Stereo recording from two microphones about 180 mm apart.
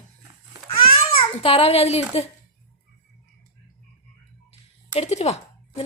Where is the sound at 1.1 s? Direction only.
30° left (ahead or behind).